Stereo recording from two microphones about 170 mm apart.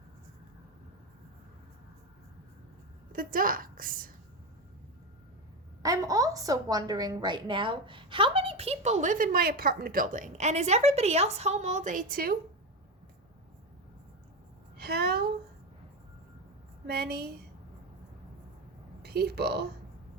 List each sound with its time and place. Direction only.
3.1 s a woman's voice: 55° right (ahead or behind)
5.8 s a woman's voice: 20° right (ahead or behind); by 12.4 s 60° right (ahead or behind)
14.8 s a woman's voice: 70° right (ahead or behind)
16.8 s speech: 70° right (ahead or behind)
19.0 s speech: 70° right (ahead or behind)